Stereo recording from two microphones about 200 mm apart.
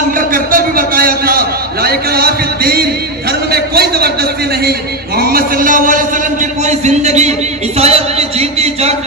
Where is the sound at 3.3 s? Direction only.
50° right (ahead or behind).